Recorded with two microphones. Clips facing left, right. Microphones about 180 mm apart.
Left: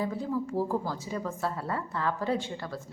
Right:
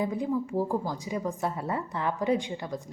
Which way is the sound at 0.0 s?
15° right (ahead or behind).